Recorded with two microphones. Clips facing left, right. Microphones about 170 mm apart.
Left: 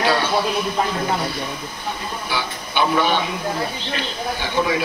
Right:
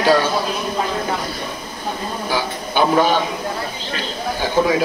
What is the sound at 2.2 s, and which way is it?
Speech, 40° right (ahead or behind).